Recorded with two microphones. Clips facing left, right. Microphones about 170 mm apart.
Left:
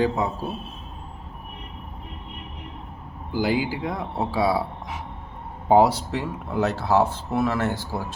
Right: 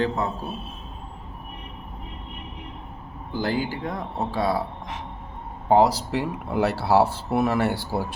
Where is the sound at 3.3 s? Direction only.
10° left (ahead or behind).